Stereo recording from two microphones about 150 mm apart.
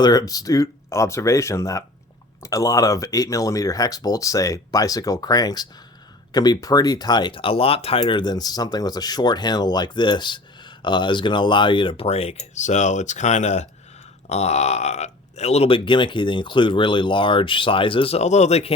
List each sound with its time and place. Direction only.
0.0 s speech: 25° left (ahead or behind); by 18.7 s 45° left (ahead or behind)